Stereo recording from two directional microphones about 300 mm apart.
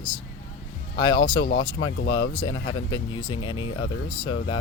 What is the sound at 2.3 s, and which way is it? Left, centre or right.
Speech, centre.